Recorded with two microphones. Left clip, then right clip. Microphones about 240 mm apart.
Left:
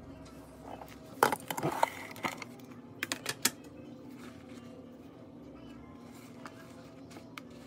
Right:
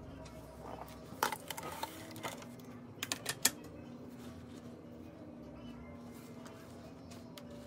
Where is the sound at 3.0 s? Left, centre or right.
Centre.